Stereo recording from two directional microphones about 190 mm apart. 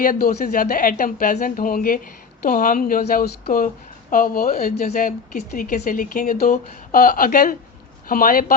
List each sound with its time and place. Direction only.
0.0 s speech: 50° left (ahead or behind)